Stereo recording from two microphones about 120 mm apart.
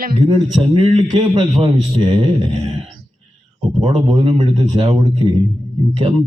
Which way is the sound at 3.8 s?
55° right (ahead or behind).